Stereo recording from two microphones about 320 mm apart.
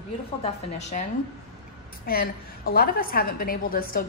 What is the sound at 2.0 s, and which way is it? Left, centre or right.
A woman's voice, left.